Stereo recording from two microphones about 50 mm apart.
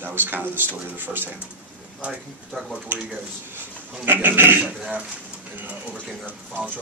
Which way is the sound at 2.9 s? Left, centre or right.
Right.